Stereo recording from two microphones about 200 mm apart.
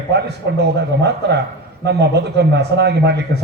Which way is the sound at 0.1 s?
60° right (ahead or behind).